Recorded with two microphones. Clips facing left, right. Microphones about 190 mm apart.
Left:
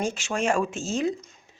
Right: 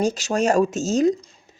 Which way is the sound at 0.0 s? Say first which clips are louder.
Right 6 dB; 40° right (ahead or behind).